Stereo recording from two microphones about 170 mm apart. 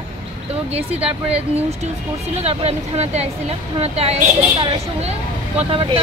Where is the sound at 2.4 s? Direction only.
40° right (ahead or behind).